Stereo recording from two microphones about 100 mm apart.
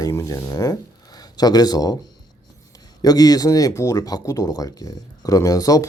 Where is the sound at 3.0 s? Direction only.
40° left (ahead or behind).